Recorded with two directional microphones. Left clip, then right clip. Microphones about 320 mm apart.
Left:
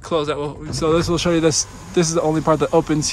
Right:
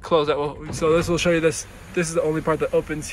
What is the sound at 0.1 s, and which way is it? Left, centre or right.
Speech, centre.